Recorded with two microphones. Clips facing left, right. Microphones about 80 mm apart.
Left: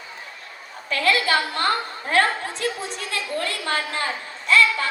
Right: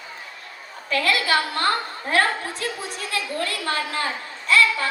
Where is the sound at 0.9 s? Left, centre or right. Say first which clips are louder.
Left 1 dB; left.